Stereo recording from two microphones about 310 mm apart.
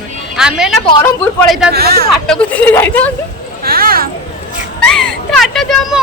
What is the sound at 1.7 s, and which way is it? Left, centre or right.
Speech, right.